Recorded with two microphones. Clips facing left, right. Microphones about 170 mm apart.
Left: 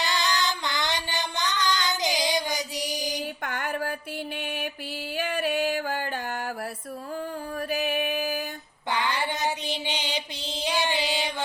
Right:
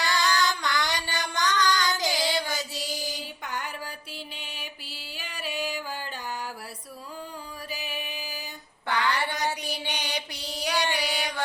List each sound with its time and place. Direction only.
0.0 s music: 20° left (ahead or behind)
3.4 s a sound: 55° left (ahead or behind)
4.4 s mantra: 55° left (ahead or behind)
5.1 s music: 55° left (ahead or behind)
7.7 s music: 55° left (ahead or behind)
8.9 s mantra: 20° left (ahead or behind)